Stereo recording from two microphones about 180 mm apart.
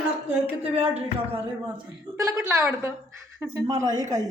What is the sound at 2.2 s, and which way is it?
A woman's voice, 15° right (ahead or behind).